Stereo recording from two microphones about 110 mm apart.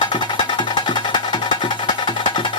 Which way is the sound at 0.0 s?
45° left (ahead or behind).